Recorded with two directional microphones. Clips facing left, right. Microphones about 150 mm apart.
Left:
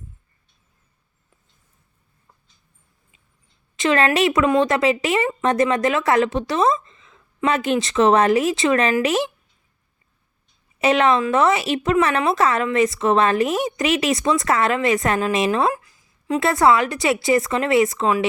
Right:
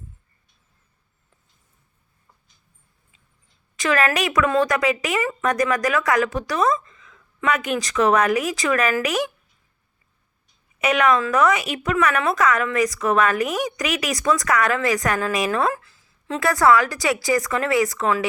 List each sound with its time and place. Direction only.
3.8 s speech: 25° left (ahead or behind)
10.8 s speech: 30° left (ahead or behind)